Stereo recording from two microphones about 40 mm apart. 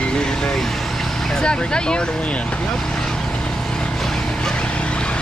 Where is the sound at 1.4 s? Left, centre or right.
Left.